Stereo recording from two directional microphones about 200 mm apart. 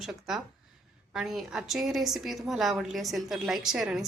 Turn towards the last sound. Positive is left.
turn(degrees=0)  # may be behind; listen again after turning